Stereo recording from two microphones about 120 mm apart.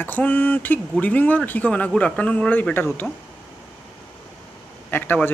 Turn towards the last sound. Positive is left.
turn(degrees=15)  # may be behind; listen again after turning